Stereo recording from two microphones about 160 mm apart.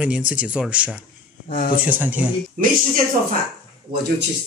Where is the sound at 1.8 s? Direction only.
10° right (ahead or behind).